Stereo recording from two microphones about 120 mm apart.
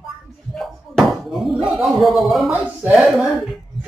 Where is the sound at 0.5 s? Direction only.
Centre (ahead or behind).